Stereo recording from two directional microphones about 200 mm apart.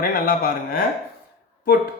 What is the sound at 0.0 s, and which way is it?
Speech, 45° left (ahead or behind).